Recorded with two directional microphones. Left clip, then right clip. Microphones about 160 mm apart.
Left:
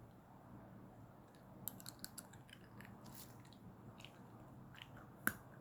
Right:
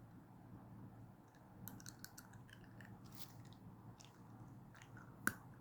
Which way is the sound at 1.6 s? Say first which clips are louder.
Left 2 dB; 25° right (ahead or behind).